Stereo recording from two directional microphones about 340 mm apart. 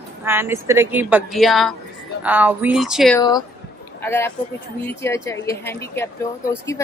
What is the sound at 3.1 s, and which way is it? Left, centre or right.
Speech, centre.